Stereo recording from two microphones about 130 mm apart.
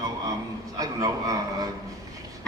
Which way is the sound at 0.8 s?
30° right (ahead or behind).